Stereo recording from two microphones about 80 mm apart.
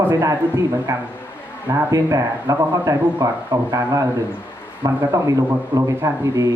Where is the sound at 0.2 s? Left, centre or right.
Right.